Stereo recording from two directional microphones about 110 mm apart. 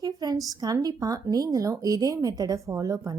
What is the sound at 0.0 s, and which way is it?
A woman's voice, 35° right (ahead or behind).